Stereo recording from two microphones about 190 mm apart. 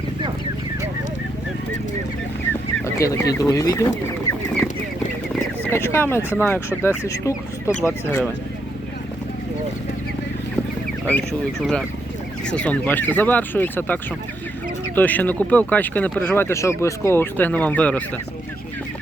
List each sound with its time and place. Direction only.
2.5 s fowl: 15° left (ahead or behind)
5.7 s speech: 15° left (ahead or behind)
11.0 s speech: 5° left (ahead or behind)